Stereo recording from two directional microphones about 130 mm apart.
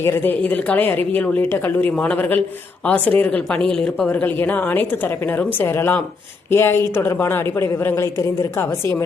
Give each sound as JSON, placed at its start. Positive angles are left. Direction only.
{"t": 0.0, "sound": "a woman's voice", "side_deg": 15}